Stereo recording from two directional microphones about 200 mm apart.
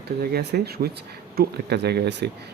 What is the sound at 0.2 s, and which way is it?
Speech, 50° right (ahead or behind).